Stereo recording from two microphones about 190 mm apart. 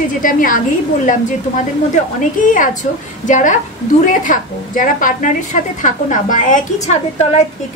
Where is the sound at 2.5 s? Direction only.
45° left (ahead or behind).